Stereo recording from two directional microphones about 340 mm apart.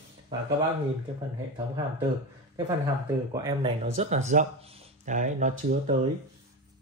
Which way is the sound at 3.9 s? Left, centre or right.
Centre.